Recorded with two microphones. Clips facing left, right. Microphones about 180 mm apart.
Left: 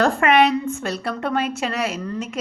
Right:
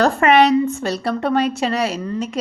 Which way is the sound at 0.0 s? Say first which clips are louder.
Right 3 dB; 40° right (ahead or behind).